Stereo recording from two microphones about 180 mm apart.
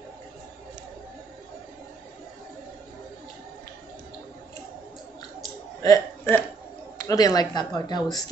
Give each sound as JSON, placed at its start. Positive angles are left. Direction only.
{"t": 5.8, "sound": "speech", "side_deg": 20}